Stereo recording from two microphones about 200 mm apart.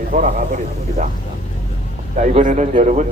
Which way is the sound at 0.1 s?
40° right (ahead or behind).